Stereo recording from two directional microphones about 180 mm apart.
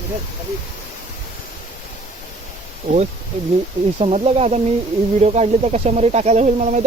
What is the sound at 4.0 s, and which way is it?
Speech, 35° right (ahead or behind).